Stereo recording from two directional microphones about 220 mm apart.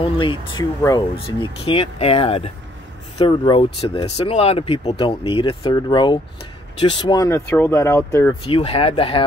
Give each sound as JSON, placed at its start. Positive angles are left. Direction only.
{"t": 0.0, "sound": "speech", "side_deg": 25}
{"t": 8.5, "sound": "speech", "side_deg": 25}